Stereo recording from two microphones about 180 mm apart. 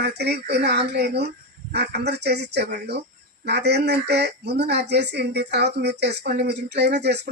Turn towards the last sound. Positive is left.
turn(degrees=-70)  # may be behind; listen again after turning